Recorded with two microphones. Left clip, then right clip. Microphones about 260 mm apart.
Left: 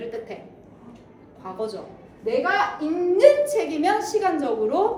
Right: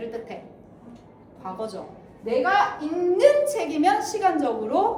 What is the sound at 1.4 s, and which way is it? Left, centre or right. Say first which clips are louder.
Speech: left 2 dB; centre.